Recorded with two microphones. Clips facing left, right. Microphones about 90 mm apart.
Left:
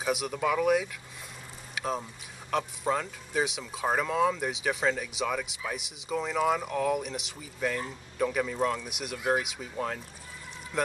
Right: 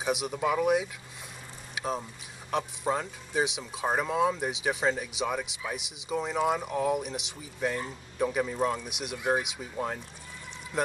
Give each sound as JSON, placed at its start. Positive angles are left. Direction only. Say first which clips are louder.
{"t": 0.1, "sound": "speech", "louder": "even", "side_deg": -15}
{"t": 2.9, "sound": "speech", "louder": "left 1 dB", "side_deg": -15}